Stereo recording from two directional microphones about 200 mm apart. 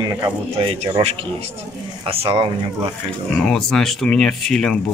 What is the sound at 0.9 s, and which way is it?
Speech, 30° right (ahead or behind).